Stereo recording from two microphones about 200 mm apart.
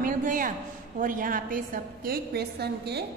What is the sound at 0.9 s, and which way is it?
A woman's voice, 40° right (ahead or behind).